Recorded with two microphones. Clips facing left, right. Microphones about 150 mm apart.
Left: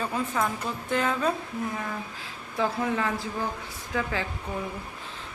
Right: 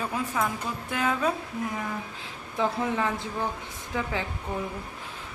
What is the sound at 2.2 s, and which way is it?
Speech, 20° right (ahead or behind).